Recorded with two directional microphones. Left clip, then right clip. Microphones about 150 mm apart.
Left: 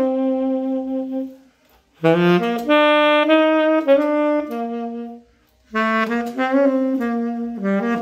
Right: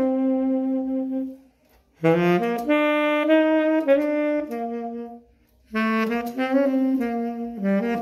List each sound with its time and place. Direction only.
0.0 s music: centre (ahead or behind)
2.0 s saxophone: 5° right (ahead or behind)
5.7 s saxophone: 20° right (ahead or behind)